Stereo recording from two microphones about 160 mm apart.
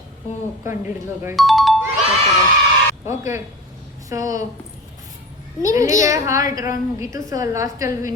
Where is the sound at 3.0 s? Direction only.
15° right (ahead or behind).